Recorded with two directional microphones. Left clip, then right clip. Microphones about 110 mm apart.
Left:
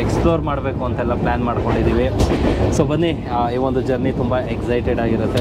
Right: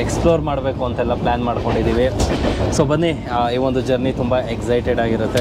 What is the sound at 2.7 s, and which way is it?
Speech, 35° right (ahead or behind).